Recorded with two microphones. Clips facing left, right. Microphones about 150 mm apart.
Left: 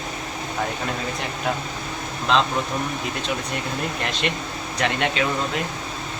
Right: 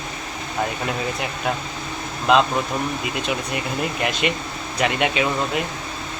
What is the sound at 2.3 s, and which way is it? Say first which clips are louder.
Speech: right 4 dB; 10° right (ahead or behind).